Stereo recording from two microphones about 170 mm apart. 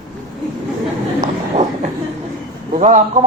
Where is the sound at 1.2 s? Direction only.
40° right (ahead or behind).